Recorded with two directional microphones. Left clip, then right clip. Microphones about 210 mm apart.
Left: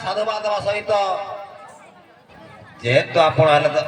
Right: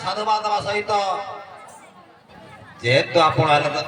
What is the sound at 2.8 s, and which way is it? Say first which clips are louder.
A man's voice: left 1 dB; 35° right (ahead or behind).